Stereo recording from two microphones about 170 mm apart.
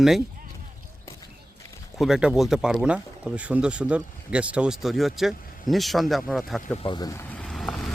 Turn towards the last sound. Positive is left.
turn(degrees=0)  # may be behind; listen again after turning